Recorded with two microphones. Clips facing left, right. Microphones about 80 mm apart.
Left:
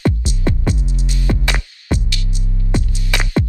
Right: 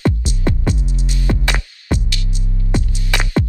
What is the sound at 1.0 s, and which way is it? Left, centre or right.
Music, right.